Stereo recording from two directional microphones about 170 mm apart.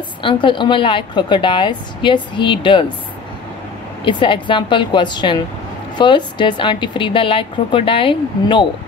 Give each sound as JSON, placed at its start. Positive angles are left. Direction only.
{"t": 0.2, "sound": "a woman's voice", "side_deg": 30}
{"t": 4.0, "sound": "a woman's voice", "side_deg": 30}